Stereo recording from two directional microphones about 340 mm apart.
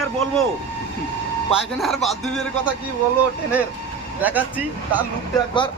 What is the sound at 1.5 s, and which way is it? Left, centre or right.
Speech, centre.